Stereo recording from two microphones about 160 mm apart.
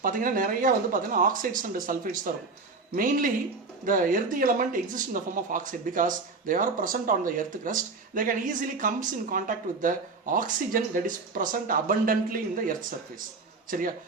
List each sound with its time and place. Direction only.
0.0 s speech: 60° right (ahead or behind)